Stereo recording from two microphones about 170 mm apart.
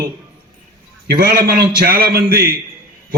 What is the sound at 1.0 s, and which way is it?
A man's voice, 70° right (ahead or behind).